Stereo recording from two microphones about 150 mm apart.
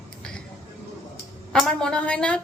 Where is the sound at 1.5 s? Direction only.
5° left (ahead or behind).